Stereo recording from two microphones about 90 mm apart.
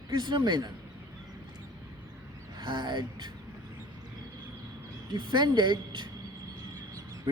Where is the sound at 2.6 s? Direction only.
50° right (ahead or behind).